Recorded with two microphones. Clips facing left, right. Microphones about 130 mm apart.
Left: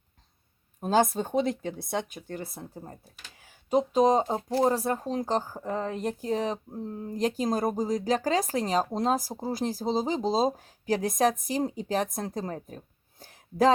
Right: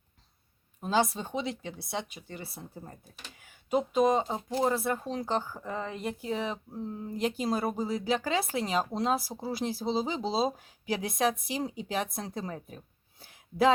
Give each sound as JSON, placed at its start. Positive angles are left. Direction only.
{"t": 0.8, "sound": "speech", "side_deg": 45}
{"t": 3.4, "sound": "speech", "side_deg": 35}